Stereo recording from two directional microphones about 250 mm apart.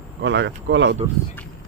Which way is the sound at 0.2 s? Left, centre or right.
Right.